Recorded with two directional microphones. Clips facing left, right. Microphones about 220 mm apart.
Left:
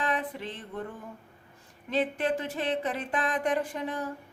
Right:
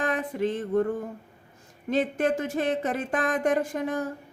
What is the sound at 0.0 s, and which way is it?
Music, 45° right (ahead or behind).